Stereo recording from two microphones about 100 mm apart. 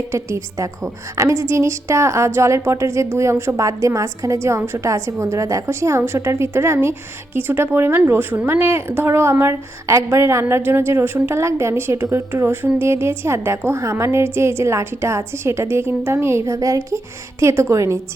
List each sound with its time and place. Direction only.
0.1 s a woman's voice: 30° right (ahead or behind)